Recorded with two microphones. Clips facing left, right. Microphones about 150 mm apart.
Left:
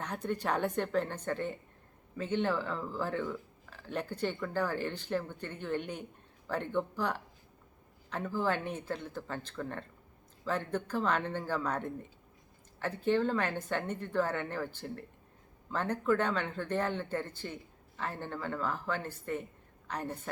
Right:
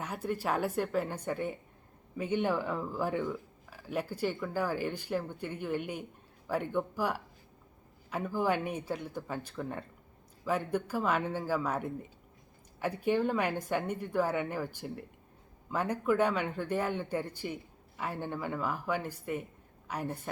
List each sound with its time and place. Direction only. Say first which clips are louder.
0.0 s a man's voice: even; 5° right (ahead or behind)